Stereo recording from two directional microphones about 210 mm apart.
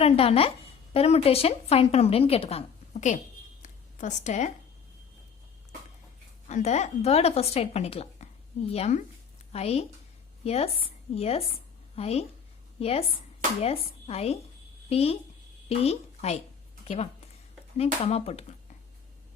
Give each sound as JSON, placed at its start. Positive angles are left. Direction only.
{"t": 0.0, "sound": "a woman's voice", "side_deg": 30}
{"t": 3.6, "sound": "a sound", "side_deg": 35}
{"t": 6.5, "sound": "a woman's voice", "side_deg": 35}